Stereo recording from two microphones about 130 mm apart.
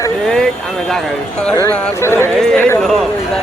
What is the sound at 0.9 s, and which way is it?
Speech, 5° left (ahead or behind).